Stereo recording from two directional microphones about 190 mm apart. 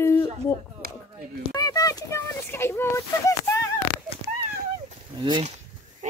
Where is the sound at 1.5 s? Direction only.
20° left (ahead or behind).